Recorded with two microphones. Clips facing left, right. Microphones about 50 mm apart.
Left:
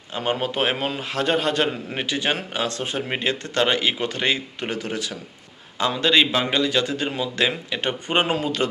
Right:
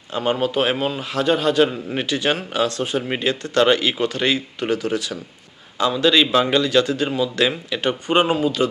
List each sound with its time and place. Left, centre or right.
0.1 s a man's voice: left
2.0 s a man's voice: left
6.3 s speech: centre; by 8.7 s left